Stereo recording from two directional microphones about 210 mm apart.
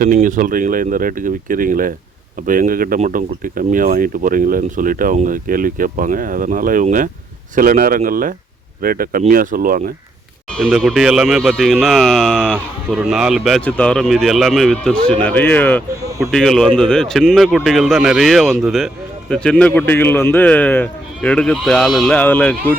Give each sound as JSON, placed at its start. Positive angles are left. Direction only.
{"t": 0.0, "sound": "speech", "side_deg": -40}
{"t": 10.5, "sound": "speech", "side_deg": 0}
{"t": 16.0, "sound": "speech", "side_deg": -15}
{"t": 16.3, "sound": "speech", "side_deg": 0}